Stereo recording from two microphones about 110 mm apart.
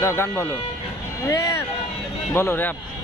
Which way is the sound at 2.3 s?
20° left (ahead or behind).